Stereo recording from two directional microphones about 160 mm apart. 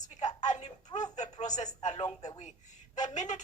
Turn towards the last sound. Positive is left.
turn(degrees=45)  # may be behind; listen again after turning